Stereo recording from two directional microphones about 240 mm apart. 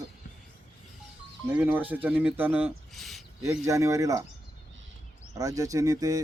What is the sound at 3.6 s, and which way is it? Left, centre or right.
Speech, centre.